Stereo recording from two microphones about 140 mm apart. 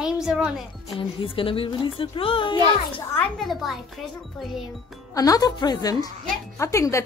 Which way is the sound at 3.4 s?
Centre (ahead or behind).